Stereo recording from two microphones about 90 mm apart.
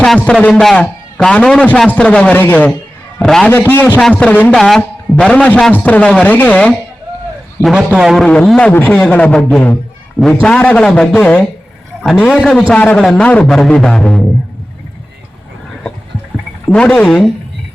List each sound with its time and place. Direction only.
0.2 s a man's voice: 15° left (ahead or behind)
3.2 s a man's voice: 10° left (ahead or behind)
3.7 s a man's voice: 20° left (ahead or behind)
4.5 s a man's voice: 5° left (ahead or behind)
7.9 s a man's voice: 5° right (ahead or behind)
8.2 s a man's voice: 10° left (ahead or behind)
16.6 s a man's voice: 10° left (ahead or behind)